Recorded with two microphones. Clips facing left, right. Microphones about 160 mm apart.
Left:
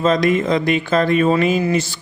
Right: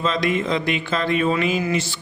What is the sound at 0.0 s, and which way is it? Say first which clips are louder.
Speech: left 6 dB; 45° left (ahead or behind).